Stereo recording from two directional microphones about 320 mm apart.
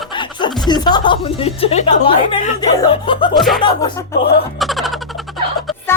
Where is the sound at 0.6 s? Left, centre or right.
Centre.